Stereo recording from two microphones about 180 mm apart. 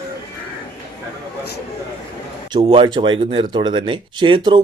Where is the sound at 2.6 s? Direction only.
35° right (ahead or behind).